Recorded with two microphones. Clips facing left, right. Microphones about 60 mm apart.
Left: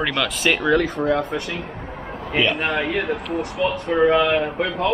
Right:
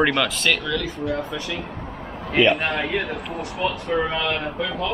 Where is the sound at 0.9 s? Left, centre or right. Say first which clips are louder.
Left 5 dB; left.